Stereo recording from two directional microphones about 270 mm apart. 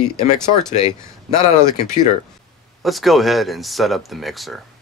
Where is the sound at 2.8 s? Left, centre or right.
Centre.